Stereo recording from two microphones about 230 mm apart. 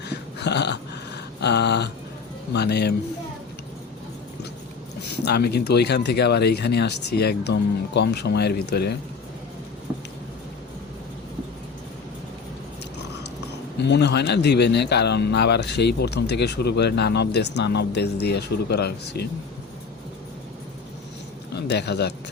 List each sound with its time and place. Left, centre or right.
0.0 s dog: left
2.5 s speech: left
5.0 s speech: left
13.8 s speech: left
21.5 s a man's voice: left